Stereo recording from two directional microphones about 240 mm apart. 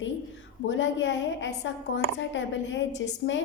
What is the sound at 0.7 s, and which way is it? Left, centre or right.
A woman's voice, left.